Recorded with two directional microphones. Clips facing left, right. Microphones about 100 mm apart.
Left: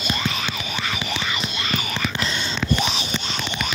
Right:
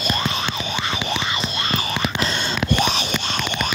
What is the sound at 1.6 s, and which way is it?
Whispering, 35° right (ahead or behind).